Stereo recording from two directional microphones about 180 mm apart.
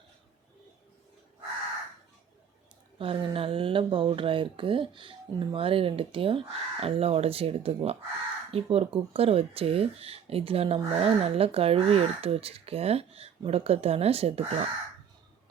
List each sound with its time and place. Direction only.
3.0 s speech: 30° right (ahead or behind)